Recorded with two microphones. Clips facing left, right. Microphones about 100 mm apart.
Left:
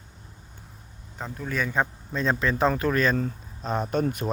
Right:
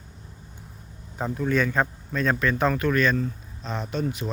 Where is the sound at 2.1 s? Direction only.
25° left (ahead or behind).